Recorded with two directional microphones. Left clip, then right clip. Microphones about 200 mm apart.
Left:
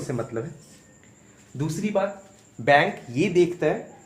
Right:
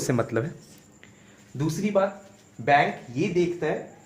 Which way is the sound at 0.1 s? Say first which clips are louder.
Right 4 dB; 50° right (ahead or behind).